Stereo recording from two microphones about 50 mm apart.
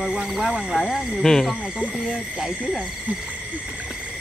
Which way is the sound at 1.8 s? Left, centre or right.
Centre.